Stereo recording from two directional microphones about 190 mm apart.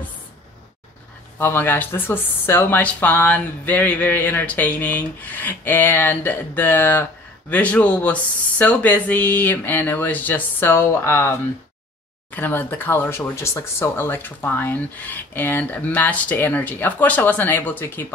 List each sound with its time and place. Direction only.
1.4 s speech: 10° left (ahead or behind)